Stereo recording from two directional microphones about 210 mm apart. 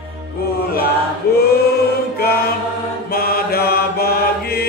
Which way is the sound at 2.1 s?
45° left (ahead or behind).